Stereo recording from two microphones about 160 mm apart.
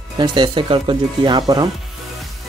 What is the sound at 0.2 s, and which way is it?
Speech, 30° right (ahead or behind).